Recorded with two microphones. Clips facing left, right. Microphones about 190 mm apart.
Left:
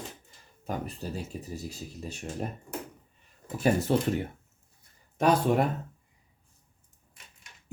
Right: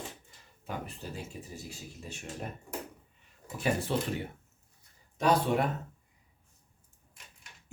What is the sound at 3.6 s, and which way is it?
Speech, 45° left (ahead or behind).